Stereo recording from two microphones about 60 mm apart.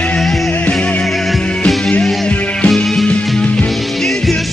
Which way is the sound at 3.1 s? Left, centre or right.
Centre.